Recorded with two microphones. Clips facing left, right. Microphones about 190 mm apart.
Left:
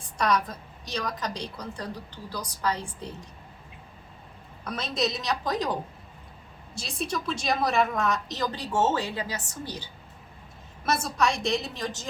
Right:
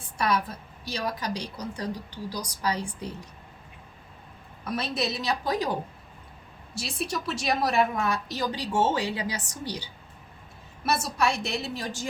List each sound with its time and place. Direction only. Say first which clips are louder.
0.2 s a woman's voice: left 1 dB; 10° right (ahead or behind)
4.6 s a woman's voice: even; 5° right (ahead or behind)
6.8 s a woman's voice: left 1 dB; 5° right (ahead or behind)